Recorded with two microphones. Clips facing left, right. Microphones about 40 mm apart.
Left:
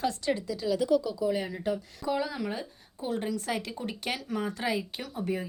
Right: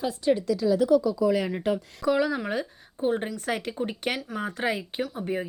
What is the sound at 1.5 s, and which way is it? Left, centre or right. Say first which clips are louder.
Speech: right 5 dB; right.